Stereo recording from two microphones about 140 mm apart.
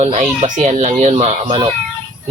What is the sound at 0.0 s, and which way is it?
Speech, 55° right (ahead or behind).